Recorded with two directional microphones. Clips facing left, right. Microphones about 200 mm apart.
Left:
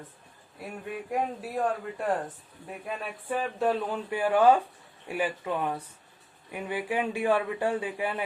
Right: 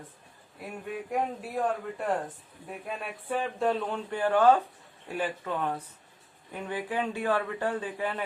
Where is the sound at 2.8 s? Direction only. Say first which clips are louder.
Left 2 dB; centre (ahead or behind).